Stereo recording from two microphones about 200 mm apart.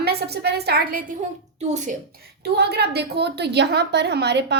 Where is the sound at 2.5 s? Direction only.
55° right (ahead or behind).